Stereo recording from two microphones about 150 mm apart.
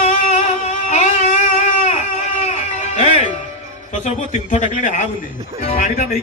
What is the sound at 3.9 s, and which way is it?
A man's voice, 50° left (ahead or behind).